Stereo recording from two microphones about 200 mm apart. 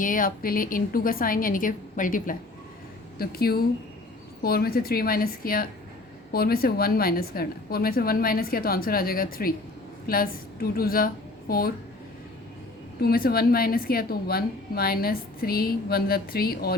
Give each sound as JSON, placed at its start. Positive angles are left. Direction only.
{"t": 0.0, "sound": "a woman's voice", "side_deg": 45}
{"t": 13.0, "sound": "a woman's voice", "side_deg": 50}